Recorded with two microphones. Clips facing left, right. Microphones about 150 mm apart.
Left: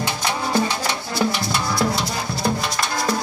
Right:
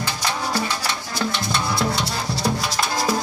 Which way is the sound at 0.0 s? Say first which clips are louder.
Left 2 dB; 15° left (ahead or behind).